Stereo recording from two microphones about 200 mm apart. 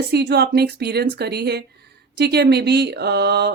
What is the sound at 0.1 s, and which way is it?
A woman's voice, 55° right (ahead or behind).